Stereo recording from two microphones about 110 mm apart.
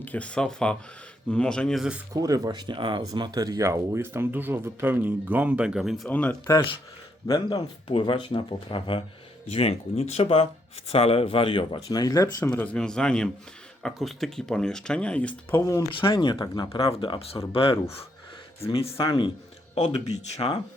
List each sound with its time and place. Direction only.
0.0 s speech: 15° left (ahead or behind)
2.1 s speech: 35° right (ahead or behind); by 6.1 s 5° right (ahead or behind)
6.1 s speech: 15° left (ahead or behind)
7.3 s speech: 35° left (ahead or behind)
7.9 s speech: 50° left (ahead or behind)
9.5 s speech: 70° left (ahead or behind); by 12.5 s 30° left (ahead or behind)
12.5 s speech: 15° left (ahead or behind)
15.9 s speech: 50° left (ahead or behind)
16.8 s speech: 55° left (ahead or behind)
19.7 s speech: 80° left